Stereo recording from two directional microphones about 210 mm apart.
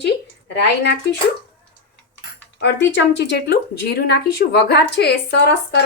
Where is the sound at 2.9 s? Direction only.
55° left (ahead or behind).